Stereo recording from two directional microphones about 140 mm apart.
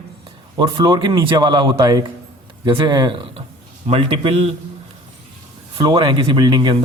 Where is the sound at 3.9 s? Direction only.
45° right (ahead or behind).